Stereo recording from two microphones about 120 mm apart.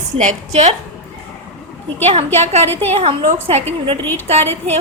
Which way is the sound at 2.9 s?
60° right (ahead or behind).